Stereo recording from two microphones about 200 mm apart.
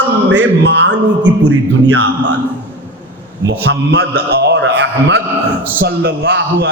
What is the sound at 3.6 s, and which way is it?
A man's voice, 55° right (ahead or behind).